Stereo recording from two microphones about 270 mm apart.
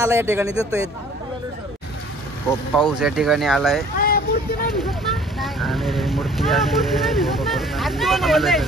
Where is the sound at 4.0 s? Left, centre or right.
Left.